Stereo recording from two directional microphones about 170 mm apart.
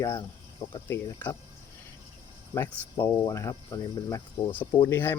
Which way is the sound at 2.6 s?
15° left (ahead or behind).